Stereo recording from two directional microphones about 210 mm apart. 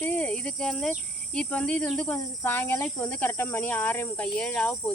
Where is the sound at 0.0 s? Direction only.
5° left (ahead or behind).